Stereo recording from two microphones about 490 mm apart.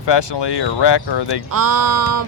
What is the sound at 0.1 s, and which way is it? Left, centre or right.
Speech, left.